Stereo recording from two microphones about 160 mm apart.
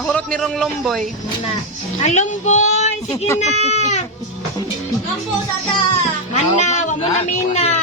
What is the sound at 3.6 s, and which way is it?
Baby cry, 45° left (ahead or behind).